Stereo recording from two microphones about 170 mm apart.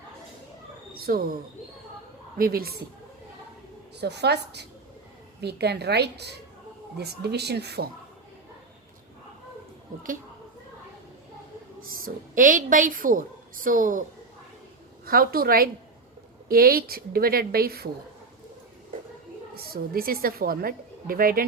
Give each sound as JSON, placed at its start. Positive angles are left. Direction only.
{"t": 0.9, "sound": "speech", "side_deg": -60}
{"t": 2.4, "sound": "a woman's voice", "side_deg": -60}
{"t": 3.9, "sound": "a woman's voice", "side_deg": -75}
{"t": 9.9, "sound": "a woman's voice", "side_deg": -55}
{"t": 11.8, "sound": "a woman's voice", "side_deg": -55}
{"t": 15.0, "sound": "a woman's voice", "side_deg": -60}
{"t": 19.5, "sound": "a woman's voice", "side_deg": -60}